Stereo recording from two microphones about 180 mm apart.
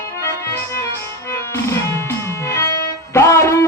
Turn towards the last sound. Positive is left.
turn(degrees=15)  # may be behind; listen again after turning